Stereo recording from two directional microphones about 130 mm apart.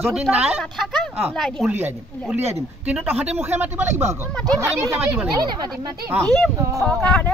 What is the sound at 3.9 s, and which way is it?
Speech, 65° right (ahead or behind).